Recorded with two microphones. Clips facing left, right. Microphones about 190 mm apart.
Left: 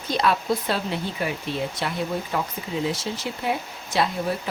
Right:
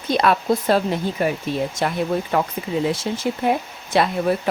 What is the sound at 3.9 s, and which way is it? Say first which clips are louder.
Speech: right 5 dB; 60° right (ahead or behind).